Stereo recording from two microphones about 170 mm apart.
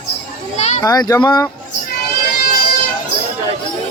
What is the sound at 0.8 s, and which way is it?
Speech, 20° left (ahead or behind).